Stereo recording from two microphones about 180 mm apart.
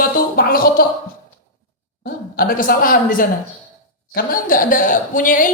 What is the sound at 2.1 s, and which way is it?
A man's voice, 55° left (ahead or behind).